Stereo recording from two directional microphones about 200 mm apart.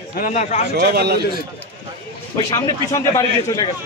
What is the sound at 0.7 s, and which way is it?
Speech, 55° right (ahead or behind).